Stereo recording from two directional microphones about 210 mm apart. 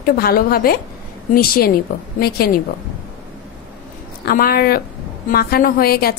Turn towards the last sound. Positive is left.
turn(degrees=45)  # may be behind; listen again after turning